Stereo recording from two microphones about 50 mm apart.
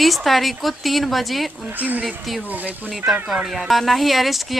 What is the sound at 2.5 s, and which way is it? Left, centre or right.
Speech, right.